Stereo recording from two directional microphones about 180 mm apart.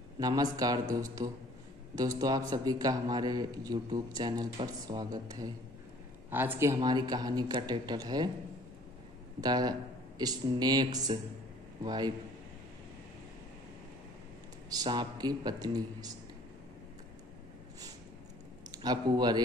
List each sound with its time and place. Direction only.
0.2 s a man's voice: 20° right (ahead or behind)
6.3 s a man's voice: 10° right (ahead or behind)
9.4 s a man's voice: 20° right (ahead or behind)
14.7 s a man's voice: 25° right (ahead or behind)
18.7 s speech: 25° right (ahead or behind)